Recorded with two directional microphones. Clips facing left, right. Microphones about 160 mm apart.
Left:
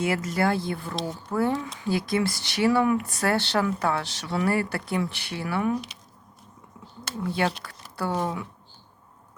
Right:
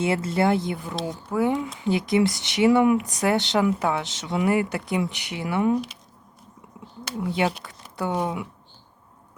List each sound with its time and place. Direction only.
0.0 s speech: 25° right (ahead or behind)
7.0 s speech: 15° right (ahead or behind)